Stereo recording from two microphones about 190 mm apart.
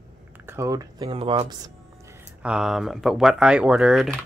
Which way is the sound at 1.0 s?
30° right (ahead or behind).